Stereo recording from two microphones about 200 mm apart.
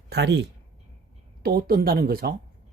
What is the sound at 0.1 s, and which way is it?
Speech, 60° right (ahead or behind).